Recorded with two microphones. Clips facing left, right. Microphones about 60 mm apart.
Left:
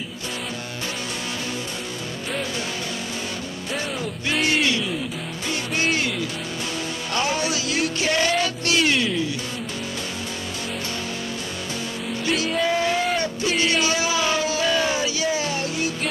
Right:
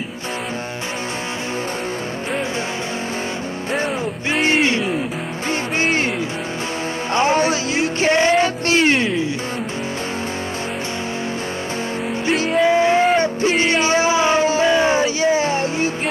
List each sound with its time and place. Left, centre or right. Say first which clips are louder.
4.3 s music: right 4 dB; right
7.2 s music: right 7 dB; right
12.3 s music: right 6 dB; right